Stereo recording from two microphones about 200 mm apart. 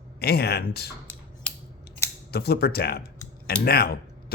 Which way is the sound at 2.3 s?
55° left (ahead or behind).